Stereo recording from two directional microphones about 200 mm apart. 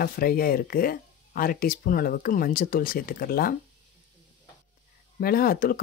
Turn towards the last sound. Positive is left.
turn(degrees=45)  # may be behind; listen again after turning